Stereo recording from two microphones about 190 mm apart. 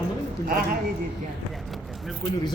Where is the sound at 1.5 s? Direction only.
Centre (ahead or behind).